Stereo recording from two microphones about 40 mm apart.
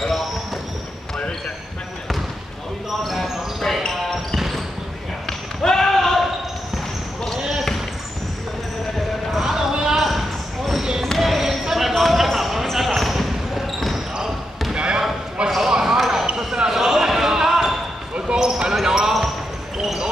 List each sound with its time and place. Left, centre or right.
3.0 s basketball bounce: centre
5.6 s basketball bounce: centre
7.3 s basketball bounce: centre
9.4 s basketball bounce: centre
9.9 s basketball bounce: centre
11.9 s a sound: centre
12.7 s basketball bounce: centre
14.7 s basketball bounce: right
15.4 s a sound: right
15.7 s basketball bounce: centre